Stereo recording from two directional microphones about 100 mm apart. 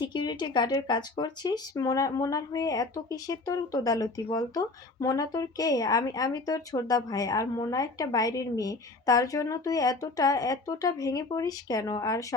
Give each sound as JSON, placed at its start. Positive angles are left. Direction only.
{"t": 0.0, "sound": "speech", "side_deg": 45}